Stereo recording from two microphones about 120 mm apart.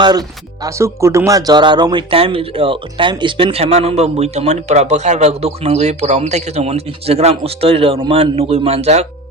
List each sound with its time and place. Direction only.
0.0 s speech: 35° right (ahead or behind); by 9.0 s 60° right (ahead or behind)